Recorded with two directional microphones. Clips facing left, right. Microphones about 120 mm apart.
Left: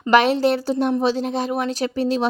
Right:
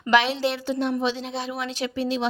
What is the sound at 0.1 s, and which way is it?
A woman's voice, 45° left (ahead or behind).